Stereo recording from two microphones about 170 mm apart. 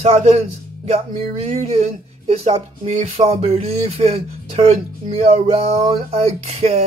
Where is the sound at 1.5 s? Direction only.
40° right (ahead or behind).